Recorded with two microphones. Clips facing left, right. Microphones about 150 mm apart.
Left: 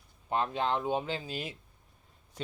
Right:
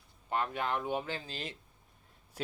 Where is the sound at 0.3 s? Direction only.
20° left (ahead or behind).